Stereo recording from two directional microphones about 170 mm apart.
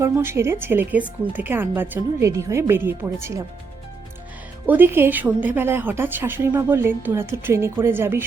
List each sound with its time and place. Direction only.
0.0 s speech: 15° right (ahead or behind)
4.6 s speech: 10° right (ahead or behind)